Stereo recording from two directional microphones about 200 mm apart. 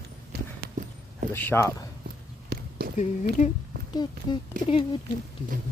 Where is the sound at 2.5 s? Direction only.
55° right (ahead or behind).